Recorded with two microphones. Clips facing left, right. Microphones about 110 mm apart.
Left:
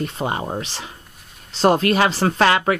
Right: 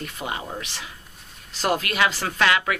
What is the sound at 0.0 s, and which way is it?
Speech, 35° left (ahead or behind).